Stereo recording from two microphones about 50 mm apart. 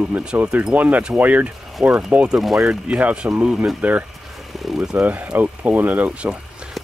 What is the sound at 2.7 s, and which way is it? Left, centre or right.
Speech, right.